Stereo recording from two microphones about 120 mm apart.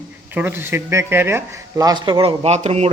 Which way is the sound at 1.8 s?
35° right (ahead or behind).